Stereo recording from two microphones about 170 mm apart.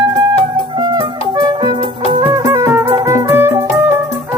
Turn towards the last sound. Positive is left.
turn(degrees=-15)  # may be behind; listen again after turning